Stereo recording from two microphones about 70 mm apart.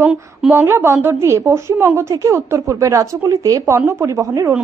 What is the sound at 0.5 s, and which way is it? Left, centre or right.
A woman's voice, right.